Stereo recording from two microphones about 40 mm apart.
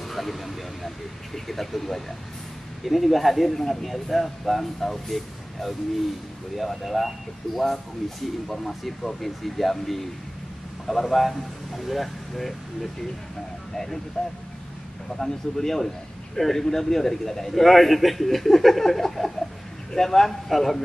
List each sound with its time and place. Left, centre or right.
0.1 s a sound: centre
0.8 s a man's voice: centre
14.2 s a man's voice: centre